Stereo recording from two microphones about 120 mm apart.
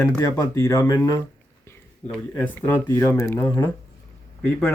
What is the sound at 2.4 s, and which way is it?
Speech, 15° left (ahead or behind).